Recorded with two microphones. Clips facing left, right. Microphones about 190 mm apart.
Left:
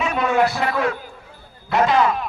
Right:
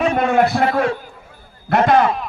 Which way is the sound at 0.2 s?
50° right (ahead or behind).